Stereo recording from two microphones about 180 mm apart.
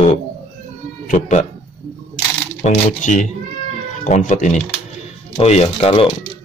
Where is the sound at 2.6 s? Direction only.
45° left (ahead or behind).